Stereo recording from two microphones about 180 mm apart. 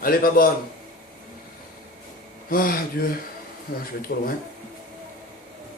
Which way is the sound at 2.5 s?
55° left (ahead or behind).